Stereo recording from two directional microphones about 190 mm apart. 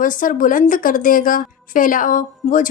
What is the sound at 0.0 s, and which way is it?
A woman's voice, 45° left (ahead or behind).